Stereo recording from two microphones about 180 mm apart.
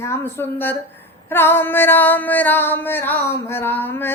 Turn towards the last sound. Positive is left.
turn(degrees=10)  # may be behind; listen again after turning